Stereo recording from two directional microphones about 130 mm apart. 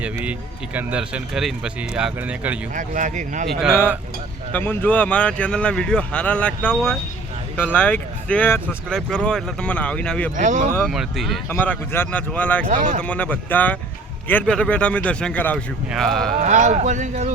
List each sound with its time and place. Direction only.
0.0 s speech: 10° right (ahead or behind)
2.7 s speech: 75° right (ahead or behind)
3.5 s speech: 5° right (ahead or behind)
4.5 s a man's voice: 15° left (ahead or behind)
8.9 s a man's voice: 5° left (ahead or behind)
10.3 s speech: 70° right (ahead or behind)
10.8 s speech: centre (ahead or behind)
11.4 s a man's voice: 15° left (ahead or behind)
12.7 s speech: 90° right
13.0 s a man's voice: 10° left (ahead or behind)
16.4 s speech: 65° right (ahead or behind)